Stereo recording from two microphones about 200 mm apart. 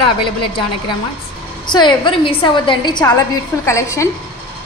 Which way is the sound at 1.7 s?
20° left (ahead or behind).